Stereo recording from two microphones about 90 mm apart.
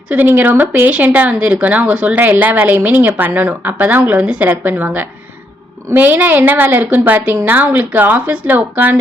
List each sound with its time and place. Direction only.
0.1 s speech: 20° right (ahead or behind)